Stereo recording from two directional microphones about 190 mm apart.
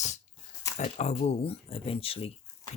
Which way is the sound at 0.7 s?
35° left (ahead or behind).